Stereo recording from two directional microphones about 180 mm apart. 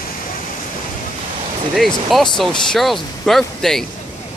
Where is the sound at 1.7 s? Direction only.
Centre (ahead or behind).